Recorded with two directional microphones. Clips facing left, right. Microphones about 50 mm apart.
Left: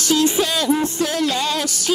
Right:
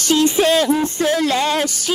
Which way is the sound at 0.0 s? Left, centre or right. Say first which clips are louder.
Right 3 dB; right.